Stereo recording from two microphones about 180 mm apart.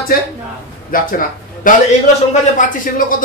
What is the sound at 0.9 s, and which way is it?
Speech, 50° left (ahead or behind).